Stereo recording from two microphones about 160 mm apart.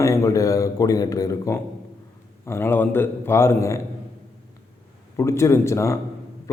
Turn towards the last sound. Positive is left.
turn(degrees=20)  # may be behind; listen again after turning